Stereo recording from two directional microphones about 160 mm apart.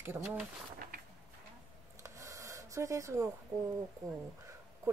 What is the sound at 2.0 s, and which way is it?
Rub, 20° right (ahead or behind).